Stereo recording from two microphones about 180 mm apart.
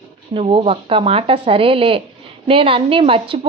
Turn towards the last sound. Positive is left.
turn(degrees=-30)  # may be behind; listen again after turning